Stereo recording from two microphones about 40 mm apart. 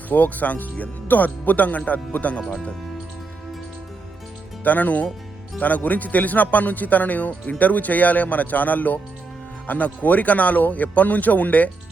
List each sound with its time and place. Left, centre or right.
0.1 s speech: left
4.6 s speech: left